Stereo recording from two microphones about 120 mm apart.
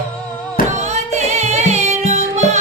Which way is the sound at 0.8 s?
70° right (ahead or behind).